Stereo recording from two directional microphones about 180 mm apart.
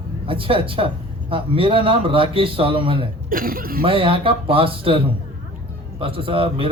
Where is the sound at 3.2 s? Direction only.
50° right (ahead or behind).